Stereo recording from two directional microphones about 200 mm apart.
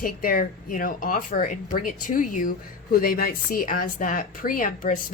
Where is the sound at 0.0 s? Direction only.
45° left (ahead or behind).